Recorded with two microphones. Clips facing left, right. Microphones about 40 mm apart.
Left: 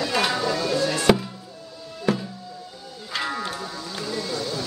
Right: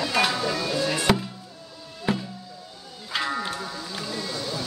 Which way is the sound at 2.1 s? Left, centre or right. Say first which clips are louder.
Left 3 dB; centre.